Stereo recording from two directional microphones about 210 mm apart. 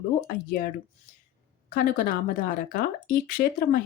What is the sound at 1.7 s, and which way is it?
Speech, 45° left (ahead or behind).